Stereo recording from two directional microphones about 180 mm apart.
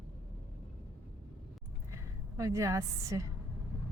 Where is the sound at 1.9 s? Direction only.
20° right (ahead or behind).